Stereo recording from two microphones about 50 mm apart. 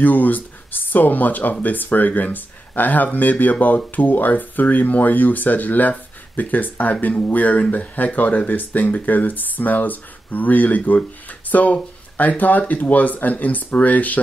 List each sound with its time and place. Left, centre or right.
0.0 s speech: left